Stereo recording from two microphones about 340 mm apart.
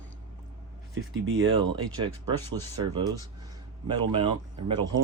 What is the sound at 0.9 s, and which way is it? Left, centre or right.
Speech, right.